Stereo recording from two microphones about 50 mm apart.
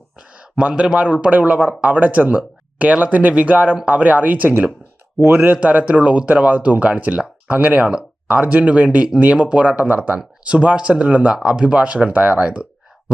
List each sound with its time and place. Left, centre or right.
0.2 s a sound: right
0.9 s speech: right
5.5 s speech: right